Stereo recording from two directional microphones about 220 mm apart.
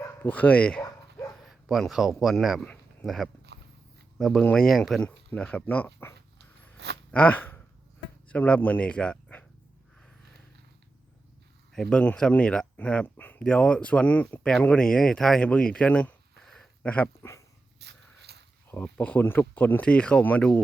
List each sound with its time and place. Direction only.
0.0 s bow-wow: 10° left (ahead or behind)
3.5 s biting: 50° right (ahead or behind)
4.2 s a man's voice: centre (ahead or behind)
11.7 s speech: 5° left (ahead or behind)
17.7 s a sound: 50° right (ahead or behind)
18.7 s speech: 10° left (ahead or behind)